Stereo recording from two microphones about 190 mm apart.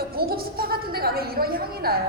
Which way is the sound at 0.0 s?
55° right (ahead or behind).